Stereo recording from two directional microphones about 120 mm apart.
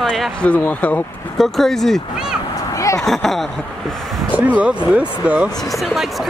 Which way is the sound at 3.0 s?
Centre (ahead or behind).